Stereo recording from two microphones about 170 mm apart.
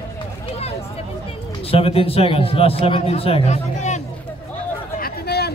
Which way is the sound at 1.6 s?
35° left (ahead or behind).